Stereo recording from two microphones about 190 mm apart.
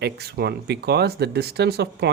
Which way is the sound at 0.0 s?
55° right (ahead or behind).